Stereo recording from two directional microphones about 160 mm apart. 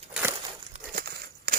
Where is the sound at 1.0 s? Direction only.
80° right.